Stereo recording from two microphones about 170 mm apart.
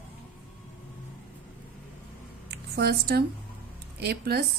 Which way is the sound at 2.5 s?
70° right (ahead or behind).